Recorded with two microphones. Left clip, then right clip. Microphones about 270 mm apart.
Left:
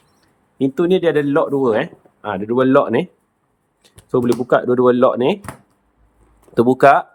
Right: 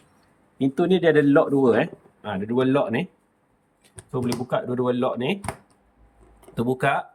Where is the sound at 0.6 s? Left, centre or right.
Centre.